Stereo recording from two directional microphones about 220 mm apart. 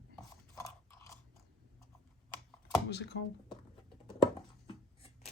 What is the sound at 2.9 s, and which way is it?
Speech, 55° left (ahead or behind).